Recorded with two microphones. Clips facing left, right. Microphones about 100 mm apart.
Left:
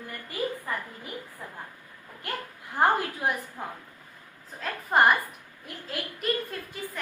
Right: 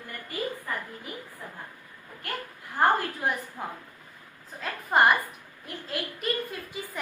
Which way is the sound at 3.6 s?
Centre (ahead or behind).